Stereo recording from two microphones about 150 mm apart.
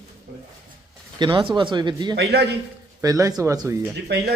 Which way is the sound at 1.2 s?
35° right (ahead or behind).